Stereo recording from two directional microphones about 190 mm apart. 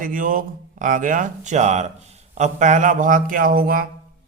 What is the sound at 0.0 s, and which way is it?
Speech, 45° right (ahead or behind).